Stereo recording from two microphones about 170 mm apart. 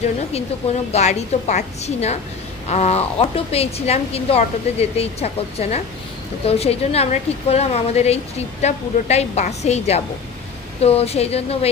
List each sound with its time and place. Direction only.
0.9 s a woman's voice: 40° left (ahead or behind)